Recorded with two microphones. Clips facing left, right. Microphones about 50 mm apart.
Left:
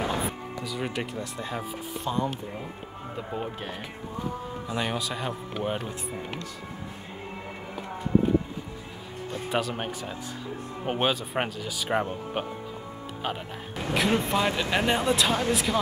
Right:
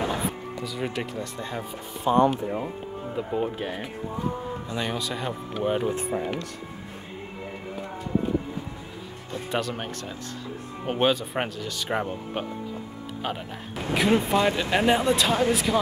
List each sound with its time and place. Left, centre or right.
0.0 s music: centre
0.7 s speech: centre
2.1 s speech: centre
3.2 s speech: centre
4.6 s speech: centre
9.5 s speech: centre
13.9 s speech: centre